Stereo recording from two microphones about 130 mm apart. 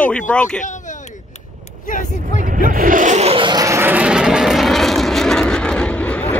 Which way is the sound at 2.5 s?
90° right.